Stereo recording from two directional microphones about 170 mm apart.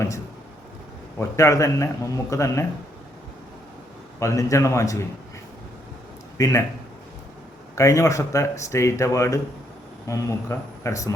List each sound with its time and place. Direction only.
1.4 s speech: 20° left (ahead or behind)
4.2 s speech: 20° left (ahead or behind)
6.3 s speech: 20° left (ahead or behind)
7.8 s speech: 20° left (ahead or behind)